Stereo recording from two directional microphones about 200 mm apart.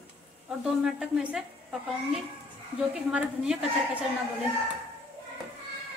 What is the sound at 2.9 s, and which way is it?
A woman's voice, 5° right (ahead or behind).